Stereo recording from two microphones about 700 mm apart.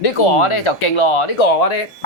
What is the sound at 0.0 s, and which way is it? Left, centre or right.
Speech, left.